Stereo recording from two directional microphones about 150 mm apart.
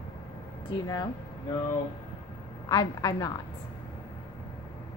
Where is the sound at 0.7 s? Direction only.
25° left (ahead or behind).